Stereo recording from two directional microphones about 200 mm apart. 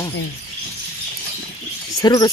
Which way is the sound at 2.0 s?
20° left (ahead or behind).